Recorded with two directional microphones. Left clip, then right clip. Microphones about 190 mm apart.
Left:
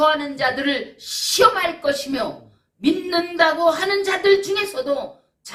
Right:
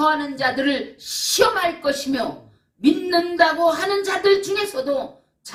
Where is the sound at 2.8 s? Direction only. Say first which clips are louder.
Right 2 dB; 20° left (ahead or behind).